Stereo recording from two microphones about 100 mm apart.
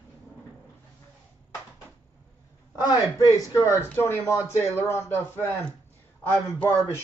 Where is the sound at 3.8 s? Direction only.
25° left (ahead or behind).